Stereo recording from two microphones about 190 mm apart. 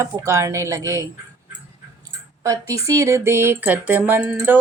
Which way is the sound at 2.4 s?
15° right (ahead or behind).